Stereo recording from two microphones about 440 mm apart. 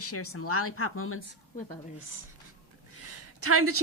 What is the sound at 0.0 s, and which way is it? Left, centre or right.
Speech, left.